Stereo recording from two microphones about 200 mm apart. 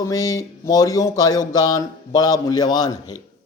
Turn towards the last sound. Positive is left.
turn(degrees=20)  # may be behind; listen again after turning